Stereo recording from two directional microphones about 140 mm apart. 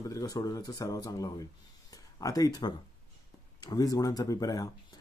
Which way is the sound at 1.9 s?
25° left (ahead or behind).